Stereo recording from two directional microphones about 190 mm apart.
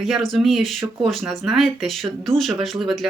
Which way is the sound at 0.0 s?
Centre (ahead or behind).